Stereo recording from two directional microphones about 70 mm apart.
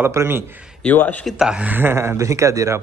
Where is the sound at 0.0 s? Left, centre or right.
Right.